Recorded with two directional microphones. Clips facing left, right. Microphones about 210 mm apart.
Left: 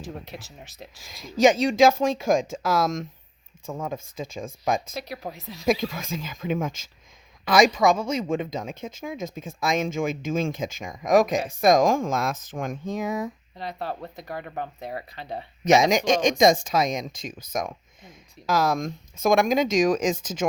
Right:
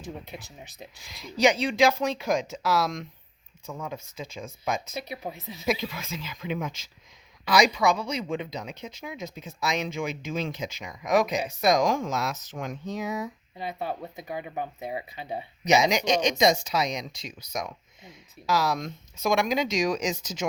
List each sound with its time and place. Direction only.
0.0 s speech: centre (ahead or behind)
1.0 s speech: 45° left (ahead or behind)
4.9 s speech: centre (ahead or behind)
5.9 s speech: 45° left (ahead or behind)
13.6 s speech: 5° right (ahead or behind)
15.6 s speech: 50° left (ahead or behind)